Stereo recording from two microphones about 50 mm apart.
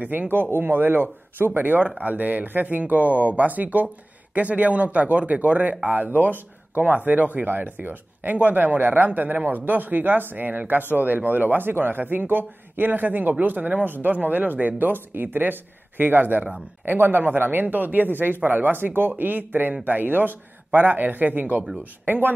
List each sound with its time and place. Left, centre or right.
0.0 s speech: right
0.3 s speech: right